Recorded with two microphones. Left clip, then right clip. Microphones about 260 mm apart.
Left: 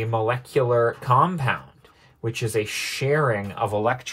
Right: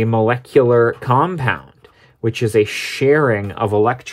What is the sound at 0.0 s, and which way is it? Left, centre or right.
Speech, right.